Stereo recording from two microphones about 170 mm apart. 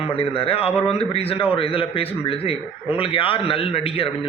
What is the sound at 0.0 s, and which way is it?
Speech, 35° left (ahead or behind).